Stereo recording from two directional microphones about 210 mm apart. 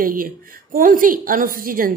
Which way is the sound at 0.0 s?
40° right (ahead or behind).